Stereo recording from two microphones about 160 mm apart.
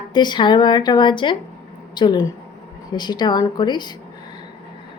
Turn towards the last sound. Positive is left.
turn(degrees=30)  # may be behind; listen again after turning